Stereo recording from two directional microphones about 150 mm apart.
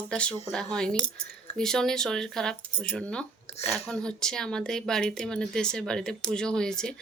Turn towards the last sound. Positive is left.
turn(degrees=5)  # may be behind; listen again after turning